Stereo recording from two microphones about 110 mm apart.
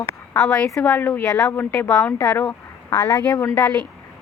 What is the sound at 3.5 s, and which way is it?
Speech, 10° left (ahead or behind).